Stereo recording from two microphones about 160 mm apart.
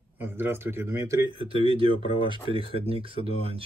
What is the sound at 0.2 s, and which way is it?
A man's voice, 15° right (ahead or behind).